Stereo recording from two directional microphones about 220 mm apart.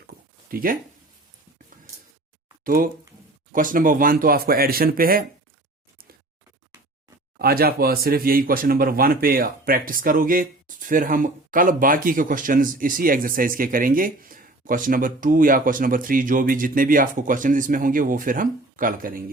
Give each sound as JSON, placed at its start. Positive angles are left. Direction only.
{"t": 0.4, "sound": "speech", "side_deg": -40}
{"t": 2.6, "sound": "speech", "side_deg": -40}
{"t": 7.3, "sound": "speech", "side_deg": -45}